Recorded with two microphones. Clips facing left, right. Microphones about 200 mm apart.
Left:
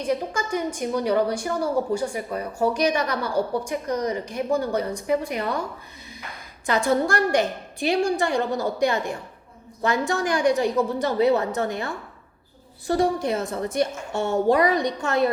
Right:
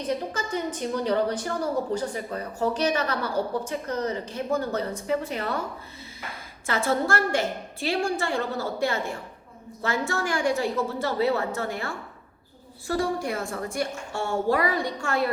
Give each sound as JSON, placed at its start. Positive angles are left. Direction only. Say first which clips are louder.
{"t": 0.0, "sound": "a woman's voice", "louder": "left 3 dB", "side_deg": 10}